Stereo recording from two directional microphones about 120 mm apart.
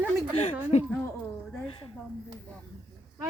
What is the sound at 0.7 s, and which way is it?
Speech, 70° left (ahead or behind).